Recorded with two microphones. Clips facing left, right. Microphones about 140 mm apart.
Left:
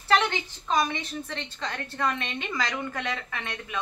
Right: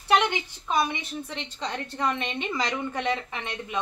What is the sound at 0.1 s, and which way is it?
A woman's voice, 15° right (ahead or behind).